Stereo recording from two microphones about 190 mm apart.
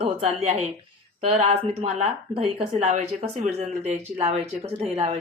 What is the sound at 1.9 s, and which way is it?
Speech, 30° right (ahead or behind).